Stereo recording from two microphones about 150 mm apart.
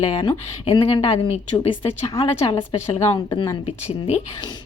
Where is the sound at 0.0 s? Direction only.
35° left (ahead or behind).